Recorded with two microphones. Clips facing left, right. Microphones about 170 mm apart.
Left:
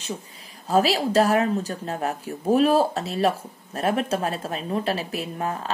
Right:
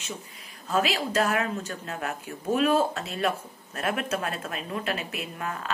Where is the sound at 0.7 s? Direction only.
35° left (ahead or behind).